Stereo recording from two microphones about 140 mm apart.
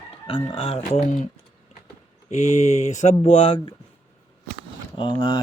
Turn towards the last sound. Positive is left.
turn(degrees=35)  # may be behind; listen again after turning